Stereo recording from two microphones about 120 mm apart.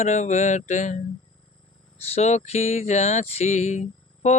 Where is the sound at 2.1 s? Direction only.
65° left (ahead or behind).